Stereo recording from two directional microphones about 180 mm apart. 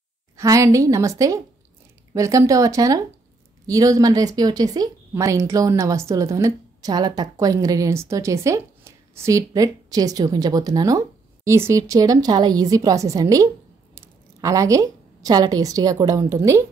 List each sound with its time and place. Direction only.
0.4 s a woman's voice: 15° right (ahead or behind)